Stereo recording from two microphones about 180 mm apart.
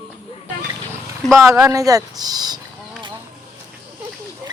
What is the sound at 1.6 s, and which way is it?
Speech, 20° right (ahead or behind).